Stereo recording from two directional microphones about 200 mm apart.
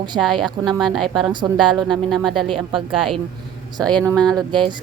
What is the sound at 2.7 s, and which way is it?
Speech, 25° right (ahead or behind).